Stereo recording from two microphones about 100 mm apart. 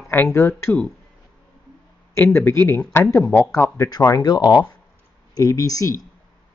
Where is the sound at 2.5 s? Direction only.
25° left (ahead or behind).